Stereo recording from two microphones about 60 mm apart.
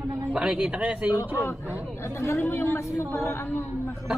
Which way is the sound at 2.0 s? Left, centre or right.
Left.